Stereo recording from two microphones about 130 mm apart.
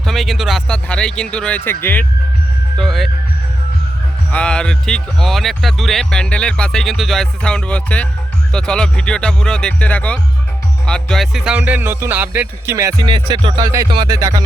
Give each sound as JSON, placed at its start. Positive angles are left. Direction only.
{"t": 0.0, "sound": "speech", "side_deg": 0}
{"t": 2.7, "sound": "speech", "side_deg": 0}
{"t": 4.3, "sound": "speech", "side_deg": 10}
{"t": 13.0, "sound": "music", "side_deg": -35}